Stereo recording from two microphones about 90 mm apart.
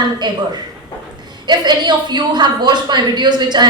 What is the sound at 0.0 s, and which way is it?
A woman's voice, 55° right (ahead or behind).